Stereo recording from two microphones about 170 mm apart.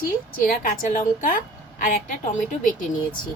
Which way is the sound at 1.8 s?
55° left (ahead or behind).